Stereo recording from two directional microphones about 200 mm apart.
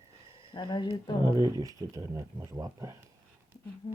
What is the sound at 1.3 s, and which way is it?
Speech, 20° right (ahead or behind).